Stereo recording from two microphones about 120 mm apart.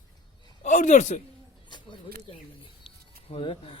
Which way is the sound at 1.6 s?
40° left (ahead or behind).